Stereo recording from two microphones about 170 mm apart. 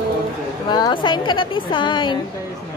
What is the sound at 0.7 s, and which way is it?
A woman's voice, 25° left (ahead or behind).